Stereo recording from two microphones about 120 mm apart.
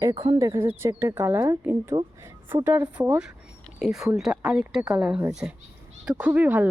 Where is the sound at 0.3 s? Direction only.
25° right (ahead or behind).